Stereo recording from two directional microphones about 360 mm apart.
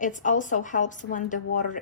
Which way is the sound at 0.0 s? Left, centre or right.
Left.